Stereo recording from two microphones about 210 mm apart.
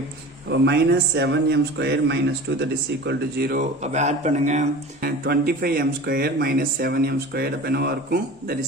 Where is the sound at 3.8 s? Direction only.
35° right (ahead or behind).